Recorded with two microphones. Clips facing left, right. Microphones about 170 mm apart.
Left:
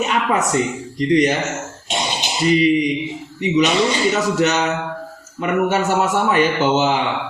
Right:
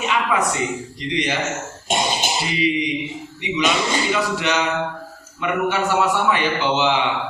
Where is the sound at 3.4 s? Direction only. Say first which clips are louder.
Left 5 dB; 45° left (ahead or behind).